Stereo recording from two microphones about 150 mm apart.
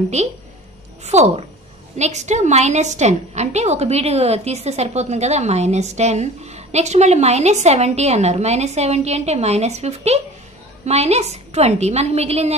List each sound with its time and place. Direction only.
0.2 s a woman's voice: 50° right (ahead or behind)